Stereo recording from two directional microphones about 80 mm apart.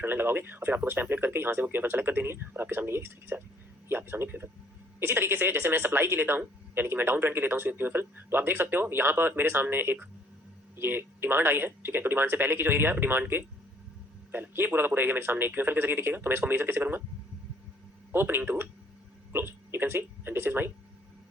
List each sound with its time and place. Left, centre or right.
0.0 s a woman's voice: right
18.1 s a woman's voice: right